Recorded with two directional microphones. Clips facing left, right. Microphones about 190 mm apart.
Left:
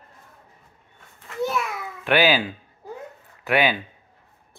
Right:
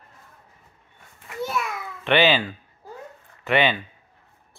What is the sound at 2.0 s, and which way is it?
Speech, 5° left (ahead or behind).